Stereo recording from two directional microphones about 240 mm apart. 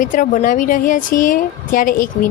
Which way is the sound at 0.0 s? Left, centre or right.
Left.